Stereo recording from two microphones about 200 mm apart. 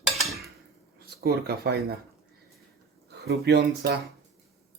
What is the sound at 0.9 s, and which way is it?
Speech, 50° right (ahead or behind).